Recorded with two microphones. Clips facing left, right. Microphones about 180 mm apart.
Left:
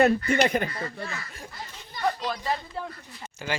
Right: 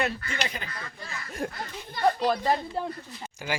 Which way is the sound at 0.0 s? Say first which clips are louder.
Left 10 dB; 55° left (ahead or behind).